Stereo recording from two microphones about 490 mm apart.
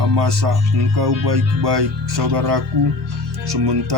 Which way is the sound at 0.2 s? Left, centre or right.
Right.